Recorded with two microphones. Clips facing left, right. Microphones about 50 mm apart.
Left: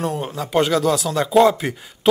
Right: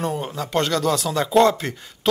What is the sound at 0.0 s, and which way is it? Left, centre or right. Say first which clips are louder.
Speech: left 1 dB; centre.